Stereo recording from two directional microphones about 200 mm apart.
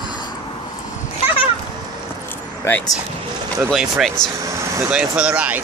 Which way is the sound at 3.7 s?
Centre (ahead or behind).